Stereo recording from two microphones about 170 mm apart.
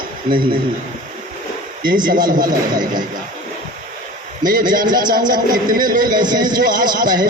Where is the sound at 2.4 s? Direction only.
25° right (ahead or behind).